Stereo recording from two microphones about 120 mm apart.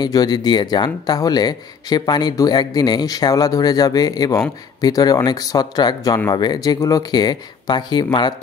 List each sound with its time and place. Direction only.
0.0 s speech: 35° left (ahead or behind)